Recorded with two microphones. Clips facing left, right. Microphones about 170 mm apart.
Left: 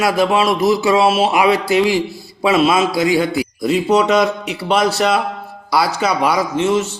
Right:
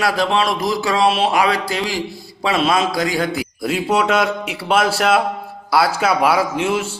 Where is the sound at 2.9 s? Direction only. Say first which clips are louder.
Left 5 dB; 40° right (ahead or behind).